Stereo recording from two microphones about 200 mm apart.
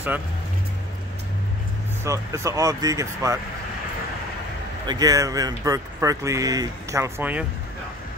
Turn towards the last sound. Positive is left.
turn(degrees=-10)  # may be behind; listen again after turning